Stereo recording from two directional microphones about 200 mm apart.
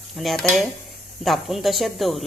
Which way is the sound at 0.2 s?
Centre (ahead or behind).